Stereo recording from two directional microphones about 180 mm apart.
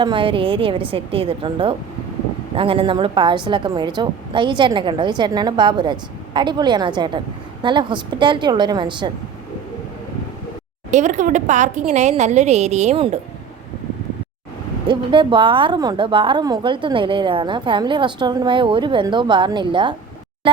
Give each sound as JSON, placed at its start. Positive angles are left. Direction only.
{"t": 0.0, "sound": "a woman's voice", "side_deg": -30}
{"t": 10.9, "sound": "a woman's voice", "side_deg": -40}
{"t": 14.8, "sound": "a woman's voice", "side_deg": -25}